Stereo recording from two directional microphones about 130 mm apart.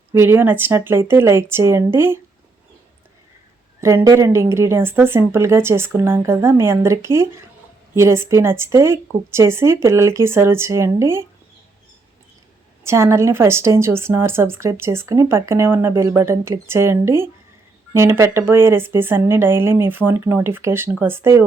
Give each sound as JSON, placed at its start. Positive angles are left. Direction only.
{"t": 0.1, "sound": "a woman's voice", "side_deg": -20}
{"t": 3.8, "sound": "a woman's voice", "side_deg": -20}
{"t": 12.8, "sound": "a woman's voice", "side_deg": -20}